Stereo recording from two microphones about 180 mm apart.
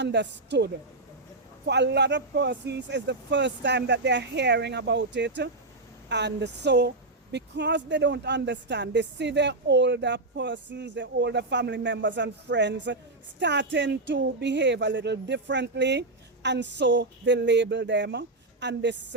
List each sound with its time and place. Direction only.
0.0 s speech: 75° right (ahead or behind)